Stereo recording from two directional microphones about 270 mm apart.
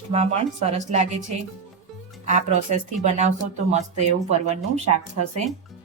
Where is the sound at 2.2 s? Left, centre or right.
Right.